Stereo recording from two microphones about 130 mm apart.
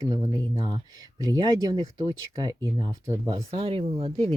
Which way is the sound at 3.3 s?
50° right (ahead or behind).